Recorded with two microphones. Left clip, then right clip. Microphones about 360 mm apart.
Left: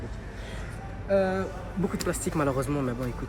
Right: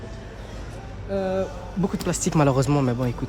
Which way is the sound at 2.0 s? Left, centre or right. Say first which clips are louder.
Right 7 dB; right.